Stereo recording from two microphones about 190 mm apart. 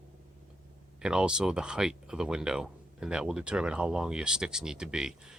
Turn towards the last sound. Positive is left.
turn(degrees=-5)  # may be behind; listen again after turning